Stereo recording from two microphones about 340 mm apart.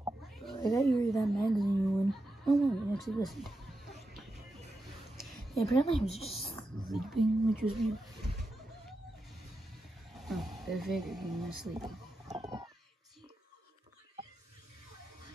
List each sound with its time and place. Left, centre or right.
0.5 s cat: centre
0.9 s a woman's voice: centre
3.3 s a sound: centre
5.1 s a sound: centre
5.8 s speech: centre
6.9 s a woman's voice: centre
10.1 s speech: centre